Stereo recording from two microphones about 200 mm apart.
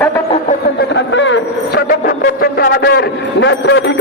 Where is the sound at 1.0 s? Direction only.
65° left (ahead or behind).